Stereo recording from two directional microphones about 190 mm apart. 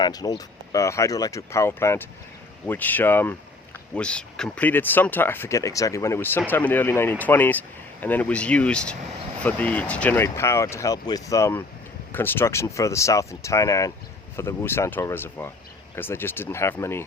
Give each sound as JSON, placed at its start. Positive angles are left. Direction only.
{"t": 0.0, "sound": "speech", "side_deg": 20}